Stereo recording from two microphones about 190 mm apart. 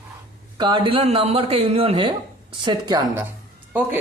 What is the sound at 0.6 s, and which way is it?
Speech, 25° right (ahead or behind).